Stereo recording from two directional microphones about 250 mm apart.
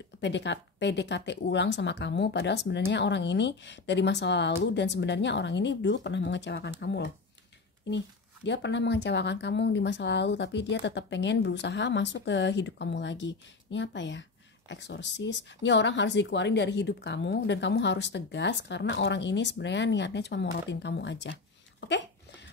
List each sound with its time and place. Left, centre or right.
0.2 s speech: left
8.5 s speech: left